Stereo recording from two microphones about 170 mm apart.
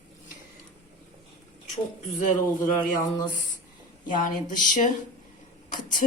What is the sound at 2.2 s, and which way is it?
Speech, 50° left (ahead or behind).